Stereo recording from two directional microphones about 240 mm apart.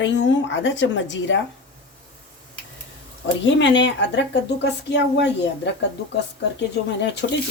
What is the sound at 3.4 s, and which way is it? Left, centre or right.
Speech, left.